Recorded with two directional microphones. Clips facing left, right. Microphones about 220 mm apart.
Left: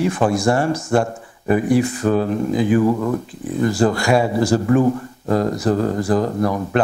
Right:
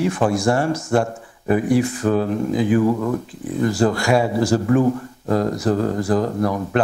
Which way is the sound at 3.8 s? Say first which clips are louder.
Left 1 dB; 15° left (ahead or behind).